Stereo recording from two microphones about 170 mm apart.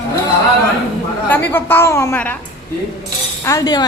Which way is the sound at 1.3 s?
10° left (ahead or behind).